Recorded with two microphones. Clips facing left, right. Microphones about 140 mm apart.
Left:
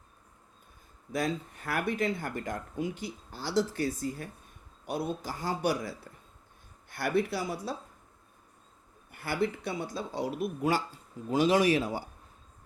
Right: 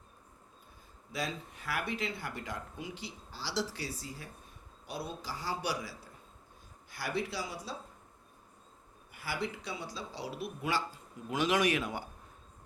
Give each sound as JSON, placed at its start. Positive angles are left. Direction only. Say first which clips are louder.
{"t": 1.1, "sound": "speech", "louder": "left 7 dB", "side_deg": 50}
{"t": 6.9, "sound": "speech", "louder": "left 7 dB", "side_deg": 55}
{"t": 9.1, "sound": "speech", "louder": "left 7 dB", "side_deg": 55}
{"t": 11.3, "sound": "speech", "louder": "left 5 dB", "side_deg": 30}